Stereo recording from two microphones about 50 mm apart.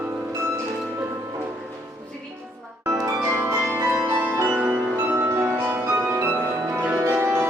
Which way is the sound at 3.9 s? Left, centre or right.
Right.